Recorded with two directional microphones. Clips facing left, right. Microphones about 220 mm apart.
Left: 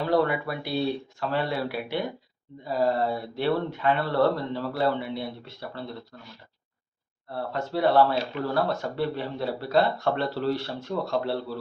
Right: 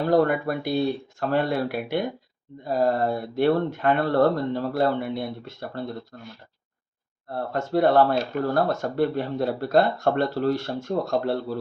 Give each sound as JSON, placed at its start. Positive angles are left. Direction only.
{"t": 0.0, "sound": "speech", "side_deg": -45}
{"t": 7.3, "sound": "speech", "side_deg": -45}